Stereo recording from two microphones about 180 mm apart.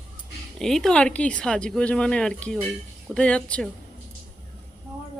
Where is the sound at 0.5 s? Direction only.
Centre (ahead or behind).